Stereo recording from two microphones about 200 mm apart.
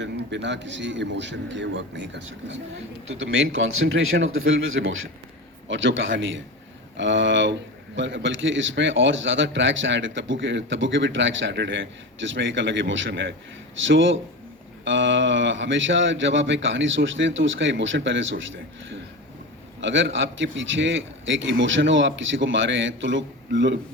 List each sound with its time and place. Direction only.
0.0 s a man's voice: 60° right (ahead or behind)
3.8 s speech: 80° right
5.6 s a man's voice: 70° right (ahead or behind)